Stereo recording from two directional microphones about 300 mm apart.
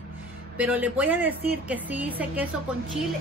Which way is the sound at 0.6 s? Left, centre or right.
Centre.